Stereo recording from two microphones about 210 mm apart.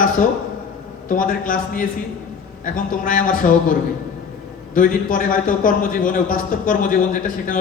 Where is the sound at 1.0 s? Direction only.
40° left (ahead or behind).